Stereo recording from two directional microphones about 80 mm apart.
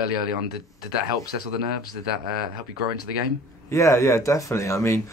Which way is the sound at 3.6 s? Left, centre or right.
Left.